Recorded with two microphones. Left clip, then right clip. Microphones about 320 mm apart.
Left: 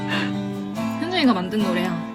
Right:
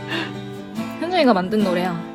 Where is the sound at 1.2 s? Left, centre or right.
Right.